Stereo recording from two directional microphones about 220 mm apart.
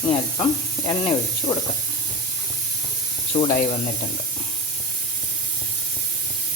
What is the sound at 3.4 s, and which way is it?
Speech, 25° left (ahead or behind).